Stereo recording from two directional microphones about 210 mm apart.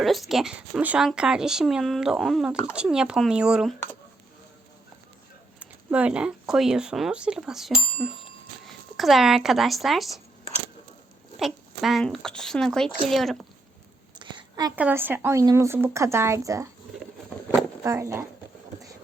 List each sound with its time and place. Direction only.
0.0 s speech: centre (ahead or behind)
5.5 s speech: 5° right (ahead or behind)
11.3 s speech: centre (ahead or behind)
14.2 s a sound: 20° right (ahead or behind)
14.8 s speech: 10° right (ahead or behind)
17.8 s speech: 15° right (ahead or behind)